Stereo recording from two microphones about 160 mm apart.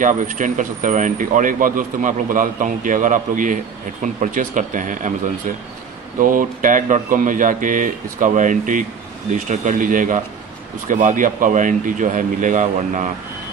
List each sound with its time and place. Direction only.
0.0 s speech: 55° right (ahead or behind)
6.1 s speech: 60° right (ahead or behind)